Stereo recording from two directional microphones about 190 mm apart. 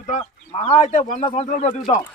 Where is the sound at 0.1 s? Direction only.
35° left (ahead or behind).